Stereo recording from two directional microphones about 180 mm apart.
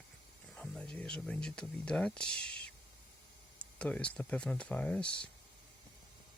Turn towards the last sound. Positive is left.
turn(degrees=5)  # may be behind; listen again after turning